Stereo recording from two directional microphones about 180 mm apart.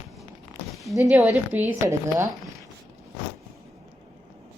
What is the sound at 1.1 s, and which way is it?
A woman's voice, 10° right (ahead or behind).